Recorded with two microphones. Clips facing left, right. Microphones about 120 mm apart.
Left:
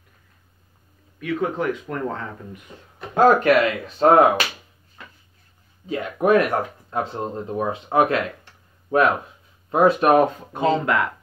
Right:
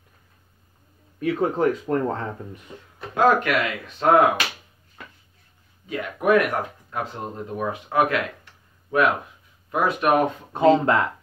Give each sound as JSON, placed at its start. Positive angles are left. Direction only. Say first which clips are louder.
{"t": 1.2, "sound": "speech", "louder": "right 2 dB", "side_deg": -35}
{"t": 3.2, "sound": "speech", "louder": "left 4 dB", "side_deg": 35}
{"t": 5.9, "sound": "speech", "louder": "left 2 dB", "side_deg": 30}
{"t": 10.5, "sound": "speech", "louder": "right 3 dB", "side_deg": -30}